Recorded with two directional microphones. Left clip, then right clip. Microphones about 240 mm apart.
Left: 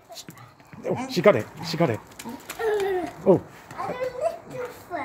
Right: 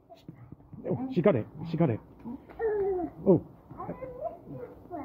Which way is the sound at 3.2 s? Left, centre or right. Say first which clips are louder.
Left 5 dB; centre.